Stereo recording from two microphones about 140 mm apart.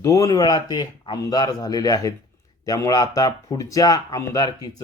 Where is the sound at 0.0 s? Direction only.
25° left (ahead or behind).